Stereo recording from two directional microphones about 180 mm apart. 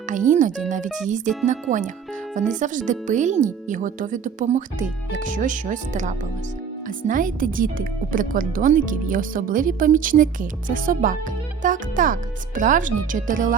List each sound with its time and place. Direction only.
0.1 s speech: 45° right (ahead or behind)